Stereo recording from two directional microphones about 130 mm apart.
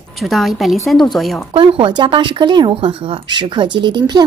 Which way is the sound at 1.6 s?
40° right (ahead or behind).